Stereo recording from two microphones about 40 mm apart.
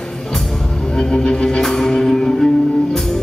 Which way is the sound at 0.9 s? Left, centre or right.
Centre.